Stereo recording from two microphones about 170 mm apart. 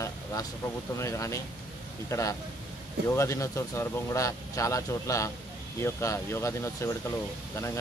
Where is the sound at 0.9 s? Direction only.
15° left (ahead or behind).